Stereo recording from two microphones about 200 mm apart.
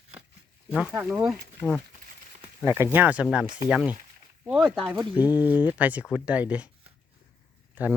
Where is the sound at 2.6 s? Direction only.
15° right (ahead or behind).